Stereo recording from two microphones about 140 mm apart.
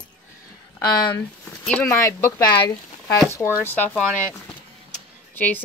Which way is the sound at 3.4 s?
20° left (ahead or behind).